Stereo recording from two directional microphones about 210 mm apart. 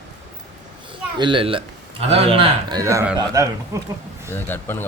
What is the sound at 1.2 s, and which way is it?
A man's voice, 25° right (ahead or behind).